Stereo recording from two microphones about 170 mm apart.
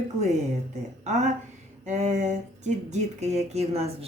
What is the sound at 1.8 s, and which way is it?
Speech, 40° right (ahead or behind).